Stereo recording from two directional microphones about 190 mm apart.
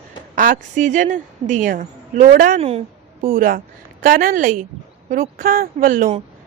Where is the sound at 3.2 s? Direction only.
50° right (ahead or behind).